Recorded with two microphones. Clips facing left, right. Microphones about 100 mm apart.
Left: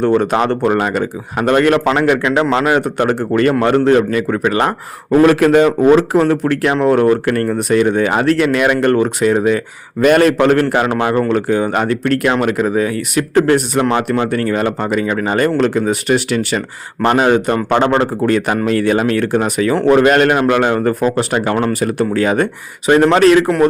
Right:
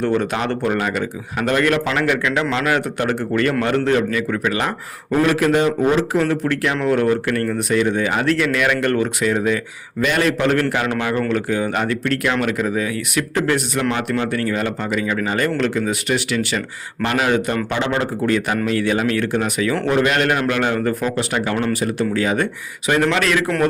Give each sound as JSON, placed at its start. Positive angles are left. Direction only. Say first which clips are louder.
{"t": 0.0, "sound": "speech", "louder": "left 6 dB", "side_deg": 40}
{"t": 5.2, "sound": "a man's voice", "louder": "left 7 dB", "side_deg": 55}
{"t": 6.1, "sound": "speech", "louder": "left 5 dB", "side_deg": 45}
{"t": 17.7, "sound": "speech", "louder": "left 7 dB", "side_deg": 50}